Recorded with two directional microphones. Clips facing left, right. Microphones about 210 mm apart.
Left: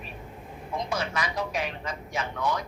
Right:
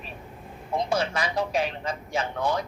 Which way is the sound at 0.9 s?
30° right (ahead or behind).